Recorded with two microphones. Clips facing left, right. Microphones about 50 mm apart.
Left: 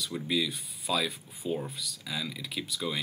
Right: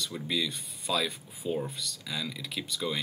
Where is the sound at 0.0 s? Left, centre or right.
Centre.